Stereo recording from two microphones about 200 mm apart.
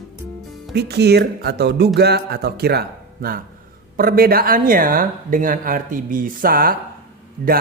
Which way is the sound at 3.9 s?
45° right (ahead or behind).